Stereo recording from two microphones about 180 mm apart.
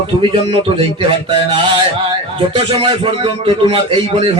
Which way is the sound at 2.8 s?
30° right (ahead or behind).